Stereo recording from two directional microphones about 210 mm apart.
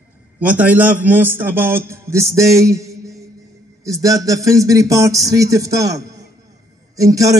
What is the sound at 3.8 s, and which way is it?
A man's voice, 15° right (ahead or behind).